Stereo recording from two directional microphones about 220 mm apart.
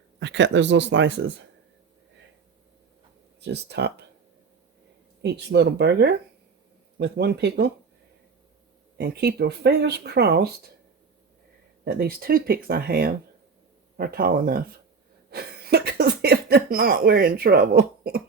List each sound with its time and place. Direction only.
0.2 s speech: 55° right (ahead or behind)
3.4 s speech: 50° right (ahead or behind)
5.2 s speech: 50° right (ahead or behind)
9.0 s speech: 50° right (ahead or behind)
11.9 s speech: 45° right (ahead or behind)